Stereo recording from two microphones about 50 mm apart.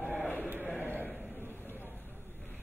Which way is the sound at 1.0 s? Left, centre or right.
Right.